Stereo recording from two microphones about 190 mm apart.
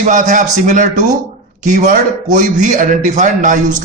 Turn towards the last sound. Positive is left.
turn(degrees=-40)  # may be behind; listen again after turning